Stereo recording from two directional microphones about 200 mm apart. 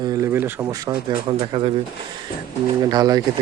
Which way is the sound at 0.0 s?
15° right (ahead or behind).